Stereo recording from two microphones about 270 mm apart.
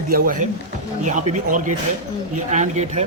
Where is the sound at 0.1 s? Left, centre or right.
Right.